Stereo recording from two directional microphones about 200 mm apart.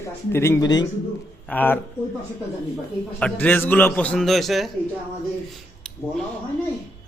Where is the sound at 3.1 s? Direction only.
5° left (ahead or behind).